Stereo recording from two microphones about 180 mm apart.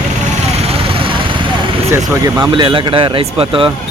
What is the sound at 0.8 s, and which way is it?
Vehicle, 30° right (ahead or behind).